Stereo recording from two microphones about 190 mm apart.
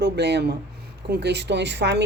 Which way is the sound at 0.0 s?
65° right (ahead or behind).